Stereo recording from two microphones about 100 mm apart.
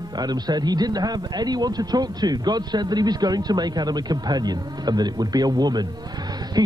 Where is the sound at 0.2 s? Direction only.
45° right (ahead or behind).